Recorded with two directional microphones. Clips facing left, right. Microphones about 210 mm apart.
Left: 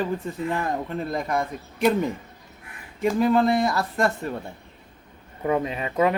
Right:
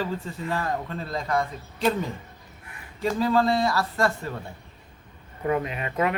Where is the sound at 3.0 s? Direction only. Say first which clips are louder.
Left 3 dB; 20° left (ahead or behind).